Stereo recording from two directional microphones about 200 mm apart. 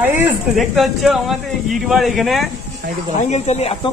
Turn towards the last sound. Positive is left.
turn(degrees=35)  # may be behind; listen again after turning